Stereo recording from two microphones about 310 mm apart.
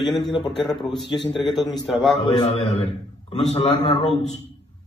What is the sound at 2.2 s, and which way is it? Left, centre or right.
A man's voice, centre.